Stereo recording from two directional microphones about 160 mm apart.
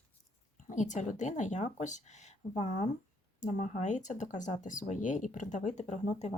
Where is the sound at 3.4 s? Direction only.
45° left (ahead or behind).